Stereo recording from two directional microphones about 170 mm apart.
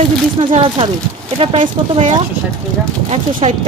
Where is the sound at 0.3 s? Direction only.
30° right (ahead or behind).